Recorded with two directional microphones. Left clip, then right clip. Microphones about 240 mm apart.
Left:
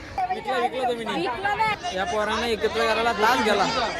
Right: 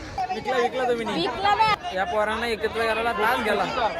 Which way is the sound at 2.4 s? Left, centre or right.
Centre.